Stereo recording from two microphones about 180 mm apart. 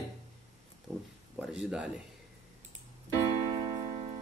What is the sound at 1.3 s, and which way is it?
Speech, 5° right (ahead or behind).